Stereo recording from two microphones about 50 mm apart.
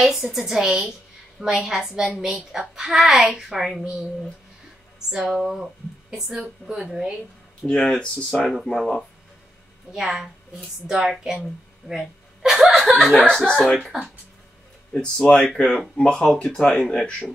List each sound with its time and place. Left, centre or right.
0.0 s a woman's voice: centre
5.1 s a woman's voice: centre
7.6 s speech: left
8.7 s speech: centre
9.9 s a woman's voice: centre
11.9 s chuckle: centre
13.1 s speech: centre
14.9 s speech: centre